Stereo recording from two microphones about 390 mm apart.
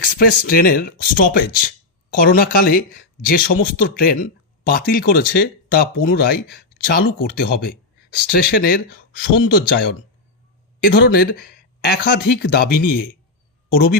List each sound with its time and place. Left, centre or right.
0.0 s speech: left